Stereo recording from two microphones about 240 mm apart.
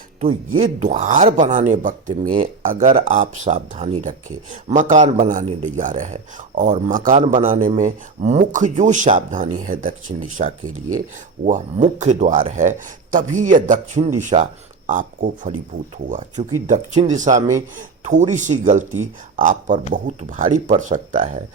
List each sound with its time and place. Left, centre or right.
0.8 s speech: right